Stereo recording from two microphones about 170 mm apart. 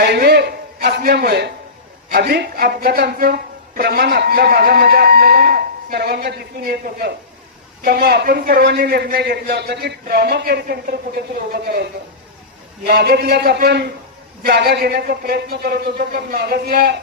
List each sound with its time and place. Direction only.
0.0 s a man's voice: 70° right (ahead or behind)
12.9 s a man's voice: 65° right (ahead or behind)